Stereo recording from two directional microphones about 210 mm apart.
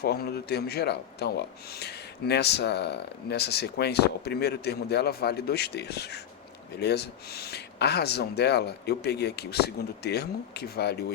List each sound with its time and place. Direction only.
0.0 s speech: 50° left (ahead or behind)